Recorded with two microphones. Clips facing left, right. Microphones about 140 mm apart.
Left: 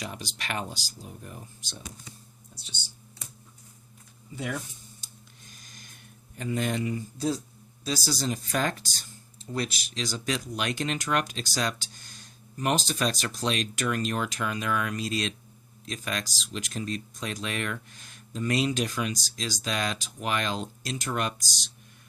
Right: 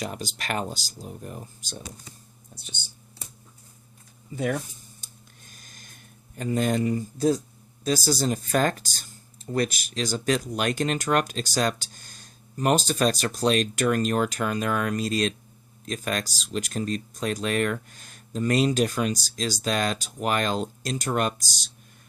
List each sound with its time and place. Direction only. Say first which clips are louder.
0.0 s speech: right 5 dB; 45° right (ahead or behind)
4.4 s speech: right 6 dB; 50° right (ahead or behind)
5.5 s a sound: even; 50° right (ahead or behind)
6.3 s speech: right 5 dB; 40° right (ahead or behind)